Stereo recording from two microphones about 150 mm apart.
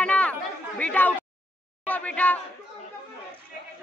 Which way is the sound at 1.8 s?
10° left (ahead or behind).